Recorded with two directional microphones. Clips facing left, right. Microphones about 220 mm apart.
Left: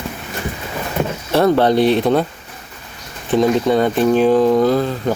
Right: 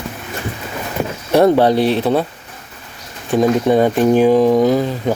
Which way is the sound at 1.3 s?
15° right (ahead or behind).